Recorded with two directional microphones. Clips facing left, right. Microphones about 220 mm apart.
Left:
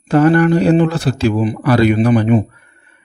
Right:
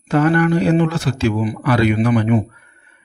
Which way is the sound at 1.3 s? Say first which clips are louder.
Left 4 dB; 25° left (ahead or behind).